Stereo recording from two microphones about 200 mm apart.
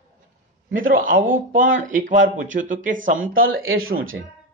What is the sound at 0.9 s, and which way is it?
Speech, 45° right (ahead or behind).